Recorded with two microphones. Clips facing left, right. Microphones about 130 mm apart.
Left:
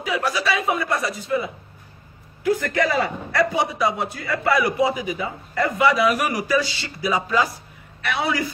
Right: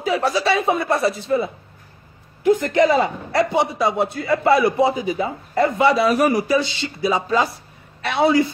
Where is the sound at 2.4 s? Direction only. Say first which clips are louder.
Right 5 dB; 20° right (ahead or behind).